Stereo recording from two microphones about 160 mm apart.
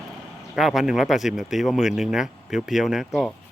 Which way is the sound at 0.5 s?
Centre (ahead or behind).